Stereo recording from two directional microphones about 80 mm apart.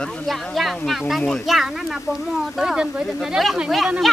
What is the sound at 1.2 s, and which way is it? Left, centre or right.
Speech, centre.